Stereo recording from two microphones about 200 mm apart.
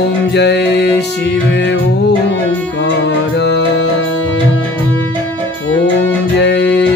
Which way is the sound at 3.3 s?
60° left (ahead or behind).